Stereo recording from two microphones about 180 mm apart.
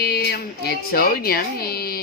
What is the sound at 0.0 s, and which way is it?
Speech, 65° left (ahead or behind).